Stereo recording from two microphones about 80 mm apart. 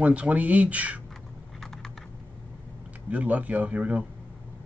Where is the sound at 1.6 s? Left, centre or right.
Centre.